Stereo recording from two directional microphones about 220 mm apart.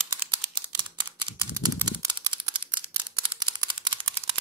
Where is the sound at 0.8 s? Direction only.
20° right (ahead or behind).